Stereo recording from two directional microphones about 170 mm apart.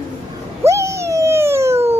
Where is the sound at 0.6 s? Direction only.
15° right (ahead or behind).